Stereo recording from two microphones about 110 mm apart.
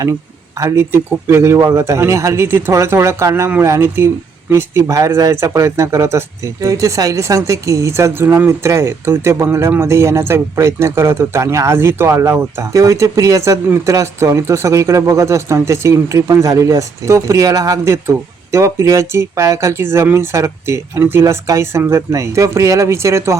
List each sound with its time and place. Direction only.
0.6 s speech: 25° right (ahead or behind)